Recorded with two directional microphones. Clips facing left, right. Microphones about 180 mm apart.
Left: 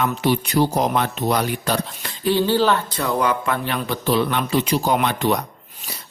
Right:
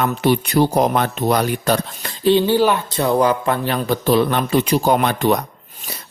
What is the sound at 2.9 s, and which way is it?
Speech, 25° right (ahead or behind).